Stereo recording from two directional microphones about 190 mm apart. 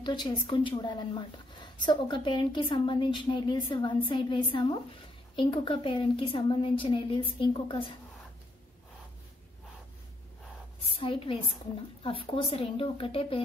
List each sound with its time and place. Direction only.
0.0 s a woman's voice: 25° left (ahead or behind)
10.8 s a woman's voice: 30° left (ahead or behind)